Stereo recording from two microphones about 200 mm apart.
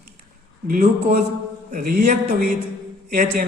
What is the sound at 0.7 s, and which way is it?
A man's voice, 40° right (ahead or behind).